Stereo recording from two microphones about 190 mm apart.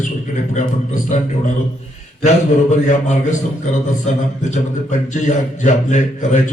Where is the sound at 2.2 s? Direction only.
40° left (ahead or behind).